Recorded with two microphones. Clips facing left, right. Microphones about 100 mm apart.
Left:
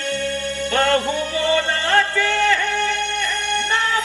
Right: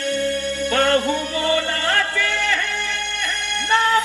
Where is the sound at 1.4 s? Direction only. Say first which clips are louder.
Left 1 dB; 25° left (ahead or behind).